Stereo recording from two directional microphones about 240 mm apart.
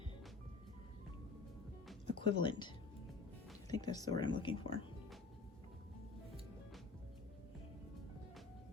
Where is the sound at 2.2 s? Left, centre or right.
Centre.